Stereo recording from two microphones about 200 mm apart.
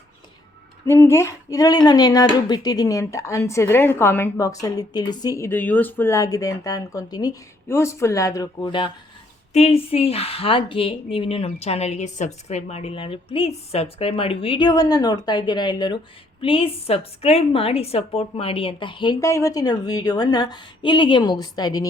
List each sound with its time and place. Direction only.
0.9 s a woman's voice: 10° left (ahead or behind)